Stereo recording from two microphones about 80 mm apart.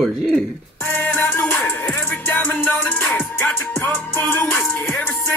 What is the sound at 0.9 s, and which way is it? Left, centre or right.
Music, centre.